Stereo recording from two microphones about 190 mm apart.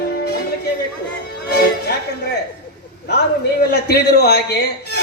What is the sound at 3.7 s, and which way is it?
Speech, 55° left (ahead or behind).